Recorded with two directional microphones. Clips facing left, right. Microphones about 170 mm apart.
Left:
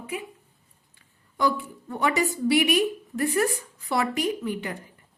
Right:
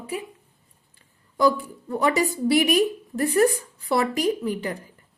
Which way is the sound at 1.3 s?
35° right (ahead or behind).